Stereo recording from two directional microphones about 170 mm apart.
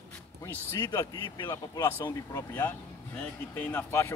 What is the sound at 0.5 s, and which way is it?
Speech, 15° left (ahead or behind).